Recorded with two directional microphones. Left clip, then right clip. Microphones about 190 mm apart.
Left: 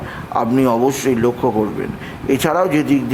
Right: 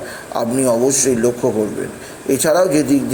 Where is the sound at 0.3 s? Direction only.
10° left (ahead or behind).